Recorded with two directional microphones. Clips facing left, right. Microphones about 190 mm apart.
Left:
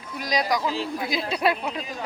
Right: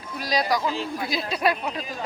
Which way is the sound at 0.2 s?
20° left (ahead or behind).